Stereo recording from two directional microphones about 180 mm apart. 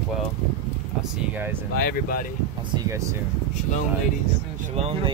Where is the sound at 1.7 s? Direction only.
55° left (ahead or behind).